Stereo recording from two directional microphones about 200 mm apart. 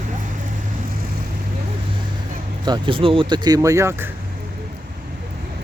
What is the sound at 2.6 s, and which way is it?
Speech, 25° right (ahead or behind).